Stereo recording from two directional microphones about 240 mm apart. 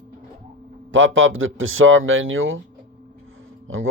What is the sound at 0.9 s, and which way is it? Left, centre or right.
Speech, right.